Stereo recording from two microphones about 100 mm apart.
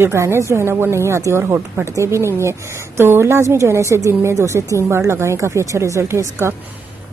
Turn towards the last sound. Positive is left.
turn(degrees=-25)  # may be behind; listen again after turning